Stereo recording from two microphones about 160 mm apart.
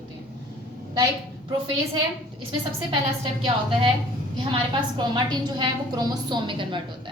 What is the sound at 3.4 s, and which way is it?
A woman's voice, 35° right (ahead or behind).